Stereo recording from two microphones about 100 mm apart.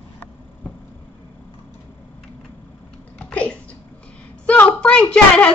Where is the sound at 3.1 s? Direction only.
15° left (ahead or behind).